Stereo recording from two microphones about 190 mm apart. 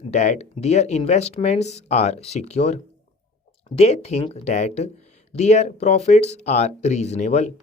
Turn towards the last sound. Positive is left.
turn(degrees=35)  # may be behind; listen again after turning